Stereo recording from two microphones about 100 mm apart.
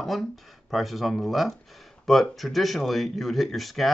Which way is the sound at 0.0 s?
Centre (ahead or behind).